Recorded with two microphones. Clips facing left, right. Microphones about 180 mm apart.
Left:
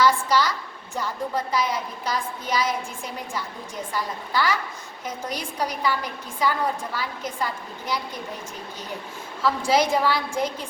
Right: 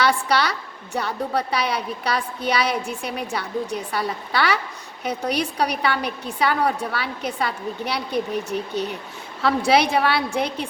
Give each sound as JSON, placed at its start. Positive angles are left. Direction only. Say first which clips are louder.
{"t": 0.0, "sound": "a woman's voice", "louder": "even", "side_deg": -70}